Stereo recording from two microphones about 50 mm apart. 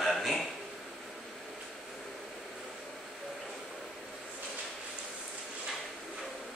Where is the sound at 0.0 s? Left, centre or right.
Centre.